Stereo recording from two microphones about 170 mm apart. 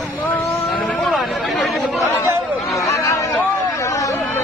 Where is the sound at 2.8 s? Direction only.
15° left (ahead or behind).